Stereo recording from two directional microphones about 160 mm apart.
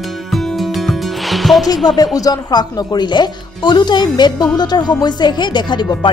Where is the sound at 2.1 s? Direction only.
25° left (ahead or behind).